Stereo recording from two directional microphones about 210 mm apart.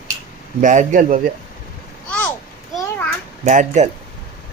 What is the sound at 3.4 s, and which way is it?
Speech, 35° right (ahead or behind).